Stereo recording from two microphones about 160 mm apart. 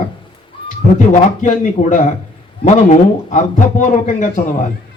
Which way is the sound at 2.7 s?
45° left (ahead or behind).